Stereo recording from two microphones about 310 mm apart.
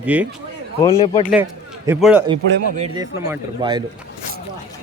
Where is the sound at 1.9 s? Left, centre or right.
Centre.